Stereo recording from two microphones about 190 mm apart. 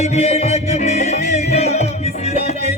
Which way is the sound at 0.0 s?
35° left (ahead or behind).